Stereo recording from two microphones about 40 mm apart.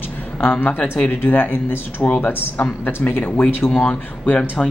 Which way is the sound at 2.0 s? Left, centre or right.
Left.